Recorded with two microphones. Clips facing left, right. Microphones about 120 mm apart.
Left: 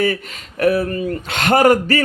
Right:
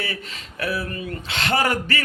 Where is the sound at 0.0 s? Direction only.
45° left (ahead or behind).